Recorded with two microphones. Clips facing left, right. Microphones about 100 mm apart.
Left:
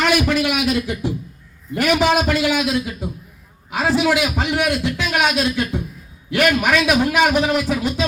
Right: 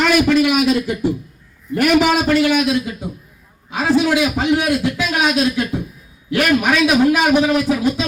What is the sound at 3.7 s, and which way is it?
A man's voice, centre (ahead or behind).